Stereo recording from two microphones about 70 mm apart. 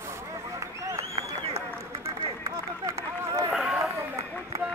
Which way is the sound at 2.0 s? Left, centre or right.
Right.